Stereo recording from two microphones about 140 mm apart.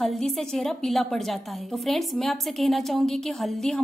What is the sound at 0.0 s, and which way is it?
A woman's voice, centre (ahead or behind).